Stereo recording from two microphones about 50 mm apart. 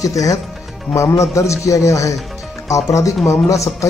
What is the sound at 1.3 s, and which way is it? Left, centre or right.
Speech, left.